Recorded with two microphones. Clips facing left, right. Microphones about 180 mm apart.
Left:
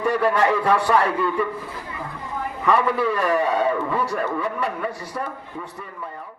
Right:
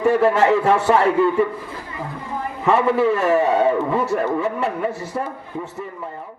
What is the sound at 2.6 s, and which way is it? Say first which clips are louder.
A man's voice: right 4 dB; 25° right (ahead or behind).